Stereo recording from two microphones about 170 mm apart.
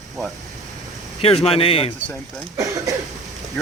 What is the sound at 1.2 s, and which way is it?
Speech, 35° left (ahead or behind).